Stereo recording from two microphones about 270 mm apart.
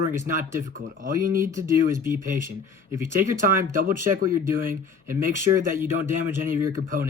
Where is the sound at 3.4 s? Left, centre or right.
Right.